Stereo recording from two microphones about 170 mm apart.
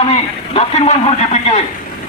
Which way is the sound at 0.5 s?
35° left (ahead or behind).